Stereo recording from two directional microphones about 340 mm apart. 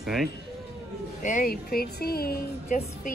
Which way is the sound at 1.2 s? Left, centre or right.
Left.